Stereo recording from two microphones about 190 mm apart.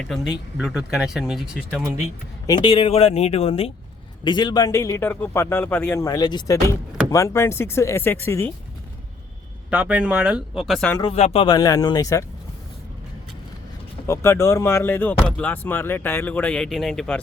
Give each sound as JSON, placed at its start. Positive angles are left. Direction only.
{"t": 0.0, "sound": "speech", "side_deg": 0}
{"t": 2.5, "sound": "a man's voice", "side_deg": 25}
{"t": 9.6, "sound": "speech", "side_deg": -10}
{"t": 10.9, "sound": "speech", "side_deg": 30}
{"t": 11.4, "sound": "speech", "side_deg": 20}
{"t": 14.1, "sound": "a man's voice", "side_deg": 15}